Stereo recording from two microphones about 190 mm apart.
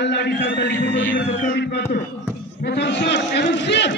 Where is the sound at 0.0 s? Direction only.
65° left (ahead or behind).